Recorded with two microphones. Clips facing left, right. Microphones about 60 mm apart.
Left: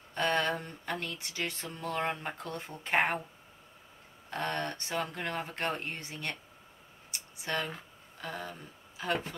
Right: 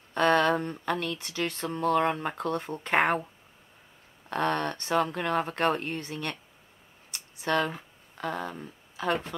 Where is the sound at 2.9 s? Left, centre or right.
Right.